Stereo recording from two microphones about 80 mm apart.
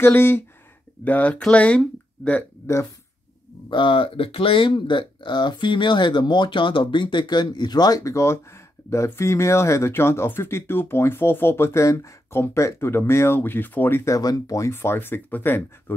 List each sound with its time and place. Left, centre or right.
0.0 s speech: left
2.6 s speech: left
3.7 s speech: left
8.0 s speech: left
14.1 s speech: left
14.7 s speech: left